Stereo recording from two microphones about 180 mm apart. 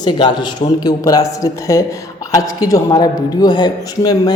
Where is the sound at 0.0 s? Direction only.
25° left (ahead or behind).